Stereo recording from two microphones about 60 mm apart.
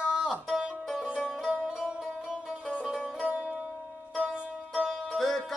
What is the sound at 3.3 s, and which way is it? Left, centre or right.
Music, centre.